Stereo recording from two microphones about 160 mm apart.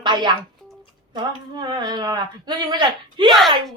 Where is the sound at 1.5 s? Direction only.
25° right (ahead or behind).